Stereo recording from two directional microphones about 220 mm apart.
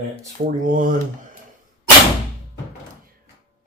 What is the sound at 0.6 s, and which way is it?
Speech, 35° right (ahead or behind).